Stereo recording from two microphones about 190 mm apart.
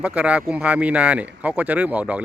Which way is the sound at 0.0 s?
5° right (ahead or behind).